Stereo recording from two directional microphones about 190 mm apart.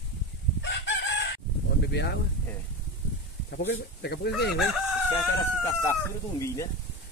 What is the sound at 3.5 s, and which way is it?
Speech, 65° left (ahead or behind).